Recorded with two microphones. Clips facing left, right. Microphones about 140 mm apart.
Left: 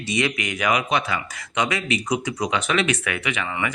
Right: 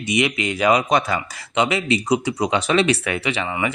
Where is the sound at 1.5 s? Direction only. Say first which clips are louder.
Right 4 dB; 25° right (ahead or behind).